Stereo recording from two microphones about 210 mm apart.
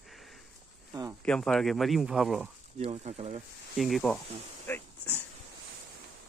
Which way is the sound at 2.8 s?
30° right (ahead or behind).